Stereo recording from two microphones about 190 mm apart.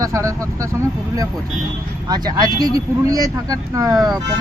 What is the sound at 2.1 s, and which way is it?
Speech, 20° right (ahead or behind).